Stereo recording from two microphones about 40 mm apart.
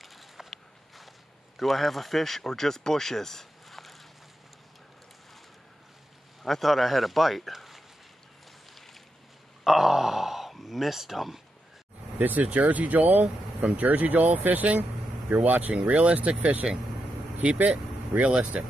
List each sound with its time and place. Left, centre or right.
0.0 s walk: centre
1.6 s speech: centre
6.4 s speech: centre
9.7 s a sound: centre
12.2 s speech: right
14.8 s vehicle: right
15.7 s speech: right
16.6 s speech: centre
17.6 s speech: right